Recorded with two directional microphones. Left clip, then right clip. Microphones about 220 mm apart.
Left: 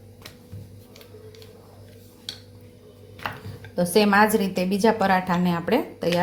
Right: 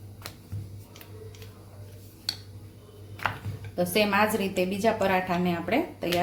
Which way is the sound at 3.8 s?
30° left (ahead or behind).